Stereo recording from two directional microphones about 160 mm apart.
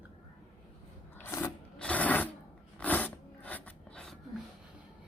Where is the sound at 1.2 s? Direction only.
15° left (ahead or behind).